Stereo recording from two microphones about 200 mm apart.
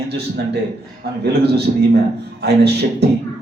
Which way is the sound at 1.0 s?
50° right (ahead or behind).